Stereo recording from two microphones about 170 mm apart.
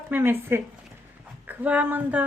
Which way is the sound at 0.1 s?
15° right (ahead or behind).